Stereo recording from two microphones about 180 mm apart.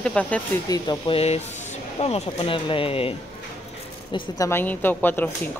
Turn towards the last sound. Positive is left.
turn(degrees=10)  # may be behind; listen again after turning